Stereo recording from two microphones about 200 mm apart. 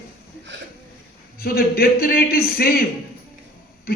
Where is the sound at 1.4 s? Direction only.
50° left (ahead or behind).